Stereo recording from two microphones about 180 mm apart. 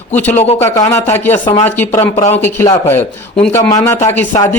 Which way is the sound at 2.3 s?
10° left (ahead or behind).